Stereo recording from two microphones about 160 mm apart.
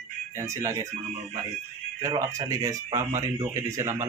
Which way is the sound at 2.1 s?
20° right (ahead or behind).